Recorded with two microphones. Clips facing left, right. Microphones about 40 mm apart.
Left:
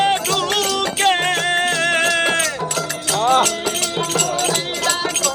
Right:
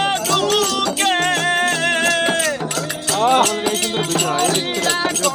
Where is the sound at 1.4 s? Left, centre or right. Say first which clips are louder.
Even; centre.